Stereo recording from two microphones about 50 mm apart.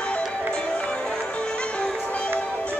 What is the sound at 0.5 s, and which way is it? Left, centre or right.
Music, centre.